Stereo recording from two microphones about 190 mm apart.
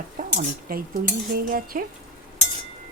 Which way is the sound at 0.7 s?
50° right (ahead or behind).